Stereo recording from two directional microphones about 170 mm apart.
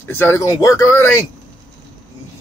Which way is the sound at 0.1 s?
15° left (ahead or behind).